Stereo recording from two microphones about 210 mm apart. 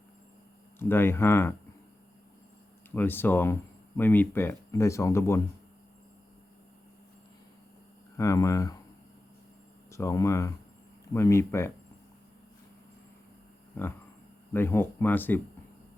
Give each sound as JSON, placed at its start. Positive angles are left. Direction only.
{"t": 0.8, "sound": "speech", "side_deg": 10}
{"t": 2.9, "sound": "speech", "side_deg": 10}
{"t": 8.1, "sound": "speech", "side_deg": 15}
{"t": 9.9, "sound": "speech", "side_deg": 15}
{"t": 13.8, "sound": "speech", "side_deg": 10}